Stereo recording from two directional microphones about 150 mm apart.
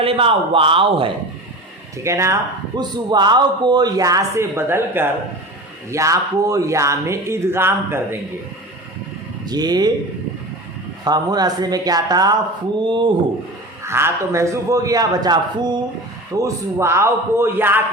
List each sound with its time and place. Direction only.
0.0 s a man's voice: 40° right (ahead or behind)
2.0 s a man's voice: 20° right (ahead or behind)
9.5 s a man's voice: 25° right (ahead or behind)
11.0 s a man's voice: 25° right (ahead or behind)
13.8 s a man's voice: 15° right (ahead or behind)